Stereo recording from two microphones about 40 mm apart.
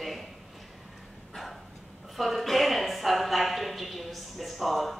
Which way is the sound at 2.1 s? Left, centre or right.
Centre.